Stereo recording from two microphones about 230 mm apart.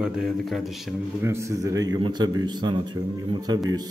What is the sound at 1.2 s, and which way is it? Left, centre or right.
A man's voice, centre.